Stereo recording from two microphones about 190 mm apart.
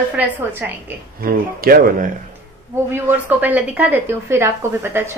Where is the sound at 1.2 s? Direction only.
50° right (ahead or behind).